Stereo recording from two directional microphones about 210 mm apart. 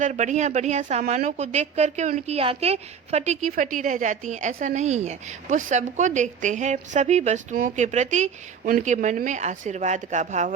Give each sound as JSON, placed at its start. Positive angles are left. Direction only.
{"t": 0.0, "sound": "speech", "side_deg": -35}